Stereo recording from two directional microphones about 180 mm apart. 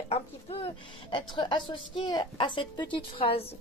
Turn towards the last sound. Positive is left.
turn(degrees=30)  # may be behind; listen again after turning